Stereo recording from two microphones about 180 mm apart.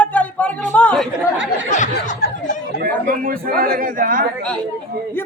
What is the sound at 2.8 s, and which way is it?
A man's voice, 50° right (ahead or behind).